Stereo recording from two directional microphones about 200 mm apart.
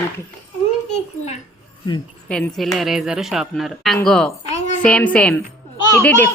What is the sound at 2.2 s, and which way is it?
A child's voice, 5° left (ahead or behind).